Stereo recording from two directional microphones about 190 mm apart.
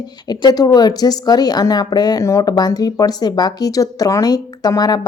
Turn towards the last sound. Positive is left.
turn(degrees=20)  # may be behind; listen again after turning